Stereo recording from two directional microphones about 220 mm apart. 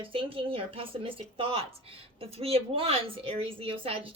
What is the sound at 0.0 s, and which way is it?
A woman's voice, 25° right (ahead or behind).